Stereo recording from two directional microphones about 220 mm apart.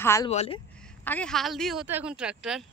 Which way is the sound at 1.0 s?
5° left (ahead or behind).